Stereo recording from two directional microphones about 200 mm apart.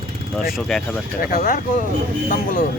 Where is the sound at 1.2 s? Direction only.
45° left (ahead or behind).